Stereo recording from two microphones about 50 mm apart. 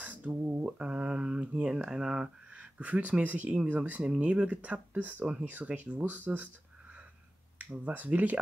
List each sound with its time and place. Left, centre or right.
0.0 s a sound: right
0.7 s speech: right
1.7 s speech: centre; by 6.5 s right
7.8 s speech: right